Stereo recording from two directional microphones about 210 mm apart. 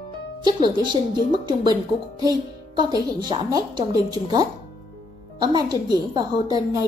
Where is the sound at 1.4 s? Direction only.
20° right (ahead or behind).